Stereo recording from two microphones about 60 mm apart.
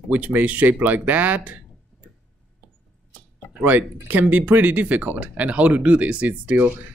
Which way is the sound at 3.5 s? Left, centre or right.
Right.